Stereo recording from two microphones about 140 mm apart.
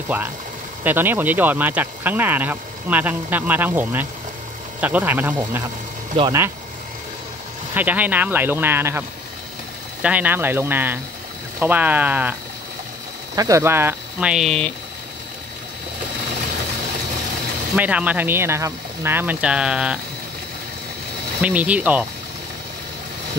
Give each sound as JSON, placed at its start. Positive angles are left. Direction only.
{"t": 0.1, "sound": "speech", "side_deg": -15}
{"t": 6.2, "sound": "speech", "side_deg": -40}
{"t": 7.7, "sound": "speech", "side_deg": -10}
{"t": 10.0, "sound": "speech", "side_deg": -10}
{"t": 13.4, "sound": "speech", "side_deg": -20}
{"t": 14.3, "sound": "speech", "side_deg": 0}
{"t": 17.7, "sound": "speech", "side_deg": -10}
{"t": 21.4, "sound": "speech", "side_deg": -10}